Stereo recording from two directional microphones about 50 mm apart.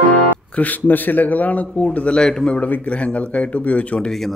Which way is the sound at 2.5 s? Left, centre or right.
Left.